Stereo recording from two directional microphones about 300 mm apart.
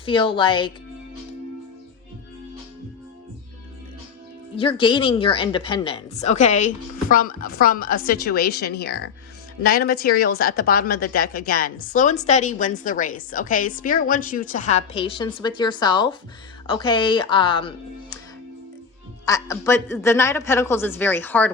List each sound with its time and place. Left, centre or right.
0.0 s a woman's voice: centre
4.6 s a woman's voice: centre
19.2 s a woman's voice: centre